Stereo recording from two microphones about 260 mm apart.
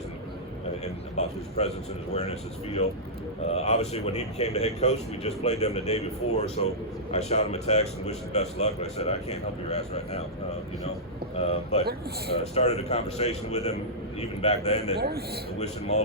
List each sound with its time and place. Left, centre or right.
0.9 s speech: left
3.4 s speech: left
11.3 s speech: left
14.9 s a man's voice: right
15.5 s speech: left